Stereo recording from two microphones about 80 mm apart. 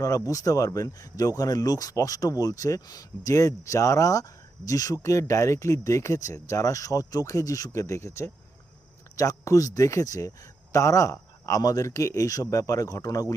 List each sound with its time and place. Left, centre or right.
0.0 s speech: left